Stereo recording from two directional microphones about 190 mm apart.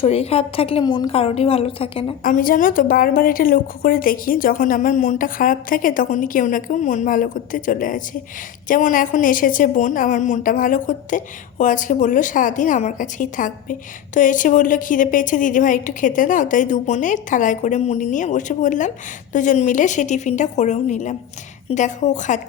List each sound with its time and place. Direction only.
0.0 s a woman's voice: 30° left (ahead or behind)
2.2 s a woman's voice: 45° left (ahead or behind)